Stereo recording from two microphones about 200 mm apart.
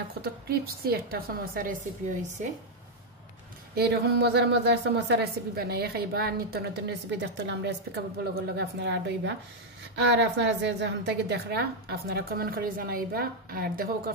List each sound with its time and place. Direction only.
0.2 s a woman's voice: 50° right (ahead or behind)
3.7 s a woman's voice: 55° right (ahead or behind)